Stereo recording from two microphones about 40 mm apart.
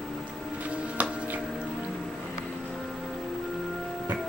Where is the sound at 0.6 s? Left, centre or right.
Right.